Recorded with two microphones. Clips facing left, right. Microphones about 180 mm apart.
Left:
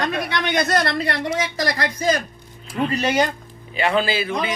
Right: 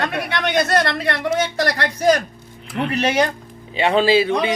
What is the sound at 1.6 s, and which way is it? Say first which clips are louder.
Speech: right 3 dB; 75° right (ahead or behind).